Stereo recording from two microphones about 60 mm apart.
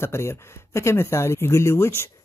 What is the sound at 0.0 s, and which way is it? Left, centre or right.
Speech, left.